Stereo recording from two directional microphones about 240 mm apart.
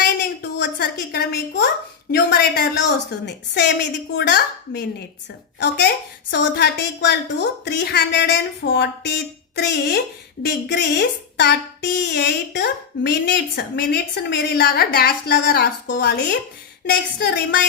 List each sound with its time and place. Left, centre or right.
0.2 s a child's voice: left